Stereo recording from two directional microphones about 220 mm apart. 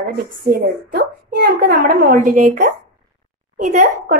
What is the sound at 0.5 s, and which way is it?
A child's voice, 45° right (ahead or behind).